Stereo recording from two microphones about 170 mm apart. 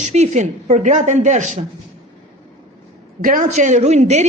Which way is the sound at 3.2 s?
55° right (ahead or behind).